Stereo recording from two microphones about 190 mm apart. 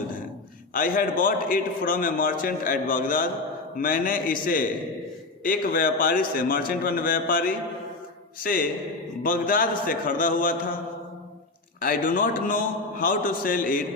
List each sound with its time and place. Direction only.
0.7 s a man's voice: 45° left (ahead or behind)
5.4 s a man's voice: 45° left (ahead or behind)
11.8 s a man's voice: 45° left (ahead or behind)